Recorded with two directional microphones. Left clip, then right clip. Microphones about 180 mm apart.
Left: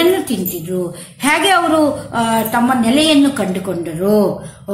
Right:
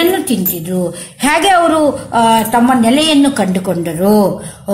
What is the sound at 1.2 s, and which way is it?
A woman's voice, 40° right (ahead or behind).